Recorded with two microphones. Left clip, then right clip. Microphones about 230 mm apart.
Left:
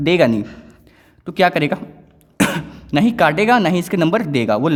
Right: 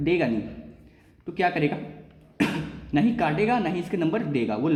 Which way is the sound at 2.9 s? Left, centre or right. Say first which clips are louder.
Left 9 dB; left.